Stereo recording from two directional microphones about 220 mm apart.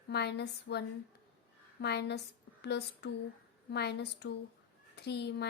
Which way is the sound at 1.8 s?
50° left (ahead or behind).